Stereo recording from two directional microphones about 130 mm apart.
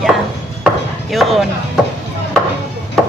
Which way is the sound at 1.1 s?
Centre (ahead or behind).